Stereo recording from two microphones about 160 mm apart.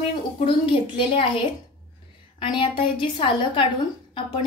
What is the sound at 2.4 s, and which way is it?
A woman's voice, 30° left (ahead or behind).